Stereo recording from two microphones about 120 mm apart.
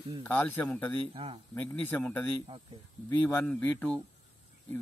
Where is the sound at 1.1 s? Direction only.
50° right (ahead or behind).